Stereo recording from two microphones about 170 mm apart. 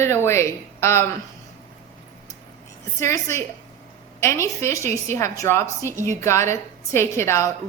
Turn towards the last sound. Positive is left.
turn(degrees=15)  # may be behind; listen again after turning